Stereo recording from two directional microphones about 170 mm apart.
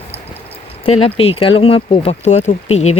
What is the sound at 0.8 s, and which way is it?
Speech, 35° left (ahead or behind).